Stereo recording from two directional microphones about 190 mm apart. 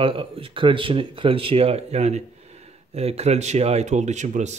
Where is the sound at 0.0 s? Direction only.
30° right (ahead or behind).